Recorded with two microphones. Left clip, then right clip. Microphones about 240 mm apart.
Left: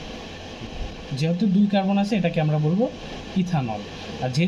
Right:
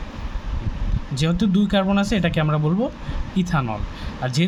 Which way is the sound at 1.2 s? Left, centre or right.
Right.